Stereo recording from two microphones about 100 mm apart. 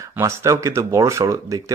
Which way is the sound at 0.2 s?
30° right (ahead or behind).